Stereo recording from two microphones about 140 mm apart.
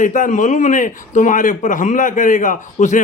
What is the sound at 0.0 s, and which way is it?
A man's voice, 65° left (ahead or behind).